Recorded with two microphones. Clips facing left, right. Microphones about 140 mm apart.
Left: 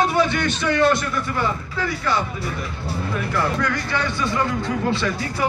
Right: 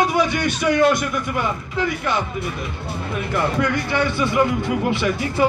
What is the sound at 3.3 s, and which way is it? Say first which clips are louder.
Speech: right 3 dB; 20° right (ahead or behind).